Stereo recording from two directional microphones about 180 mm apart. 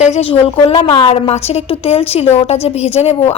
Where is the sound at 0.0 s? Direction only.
35° left (ahead or behind).